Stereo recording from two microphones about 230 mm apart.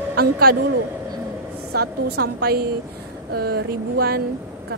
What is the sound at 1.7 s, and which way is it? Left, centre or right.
A woman's voice, right.